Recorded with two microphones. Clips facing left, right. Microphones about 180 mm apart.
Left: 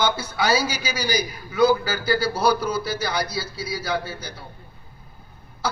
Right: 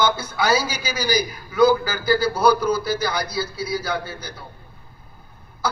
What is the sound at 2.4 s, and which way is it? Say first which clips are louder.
Speech: right 4 dB; 55° right (ahead or behind).